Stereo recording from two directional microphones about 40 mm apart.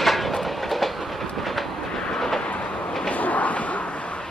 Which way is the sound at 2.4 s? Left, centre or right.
Left.